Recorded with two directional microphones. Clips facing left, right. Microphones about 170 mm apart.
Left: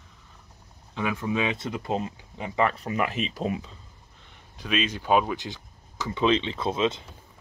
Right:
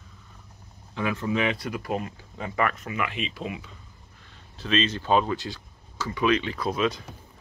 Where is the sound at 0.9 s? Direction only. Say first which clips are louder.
Right 1 dB; 15° left (ahead or behind); by 3.7 s 35° left (ahead or behind).